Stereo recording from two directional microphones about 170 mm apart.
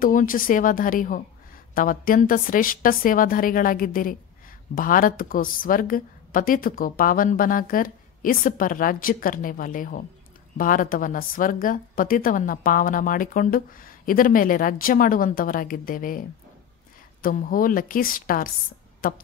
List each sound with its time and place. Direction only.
0.0 s a woman's voice: 50° left (ahead or behind)